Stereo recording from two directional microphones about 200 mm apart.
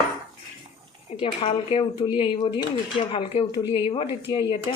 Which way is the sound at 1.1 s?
25° left (ahead or behind).